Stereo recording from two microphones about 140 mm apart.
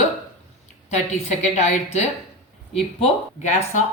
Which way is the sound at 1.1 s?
55° left (ahead or behind).